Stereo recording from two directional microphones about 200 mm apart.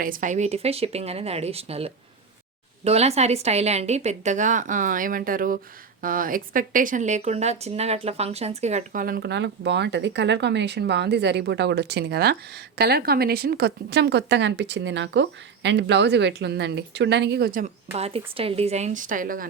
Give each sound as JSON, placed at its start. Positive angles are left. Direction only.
{"t": 0.0, "sound": "a woman's voice", "side_deg": -40}
{"t": 17.9, "sound": "a woman's voice", "side_deg": -30}